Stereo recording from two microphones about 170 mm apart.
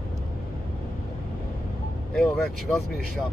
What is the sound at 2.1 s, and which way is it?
Speech, centre (ahead or behind).